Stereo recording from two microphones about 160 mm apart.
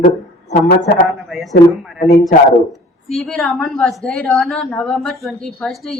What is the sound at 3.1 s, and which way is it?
A woman's voice, 5° left (ahead or behind).